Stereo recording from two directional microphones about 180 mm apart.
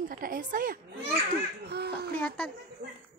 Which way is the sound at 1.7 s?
65° right (ahead or behind).